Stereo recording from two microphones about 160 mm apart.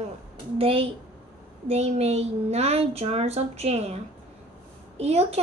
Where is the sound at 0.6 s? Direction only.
35° right (ahead or behind).